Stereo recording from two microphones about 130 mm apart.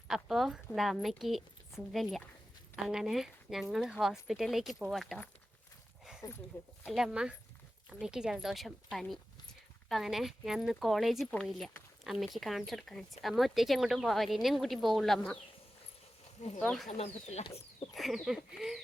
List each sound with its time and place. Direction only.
0.1 s speech: centre (ahead or behind)
6.8 s speech: 5° right (ahead or behind)
16.6 s speech: 5° left (ahead or behind)
17.0 s speech: 55° left (ahead or behind)
17.9 s speech: centre (ahead or behind)